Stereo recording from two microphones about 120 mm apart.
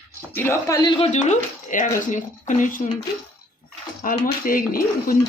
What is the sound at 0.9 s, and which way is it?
Speech, 70° left (ahead or behind).